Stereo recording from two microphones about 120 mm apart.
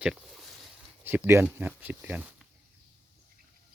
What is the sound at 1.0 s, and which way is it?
Speech, 15° right (ahead or behind).